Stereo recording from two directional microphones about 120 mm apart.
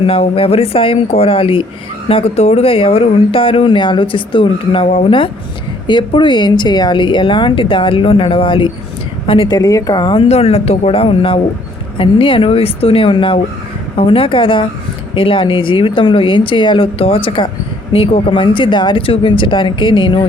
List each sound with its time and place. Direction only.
0.0 s speech: 50° left (ahead or behind)
5.9 s speech: 40° left (ahead or behind)
9.6 s speech: 30° left (ahead or behind)
10.2 s speech: 60° left (ahead or behind); by 20.2 s 45° left (ahead or behind)